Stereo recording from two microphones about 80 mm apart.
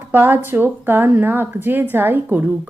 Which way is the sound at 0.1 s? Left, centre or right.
Right.